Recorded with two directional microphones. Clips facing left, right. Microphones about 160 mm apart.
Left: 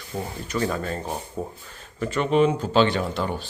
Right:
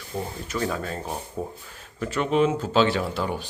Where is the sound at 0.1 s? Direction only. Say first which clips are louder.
Left 1 dB; centre (ahead or behind).